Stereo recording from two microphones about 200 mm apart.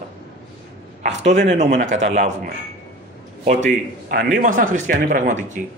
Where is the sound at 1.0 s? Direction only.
35° right (ahead or behind).